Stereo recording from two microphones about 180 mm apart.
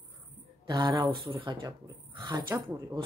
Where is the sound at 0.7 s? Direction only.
25° right (ahead or behind).